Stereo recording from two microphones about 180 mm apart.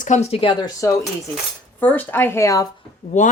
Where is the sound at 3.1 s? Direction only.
40° left (ahead or behind).